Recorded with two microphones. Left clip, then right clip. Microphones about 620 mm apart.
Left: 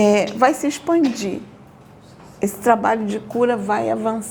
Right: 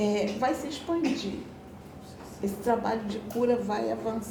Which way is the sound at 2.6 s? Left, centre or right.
Left.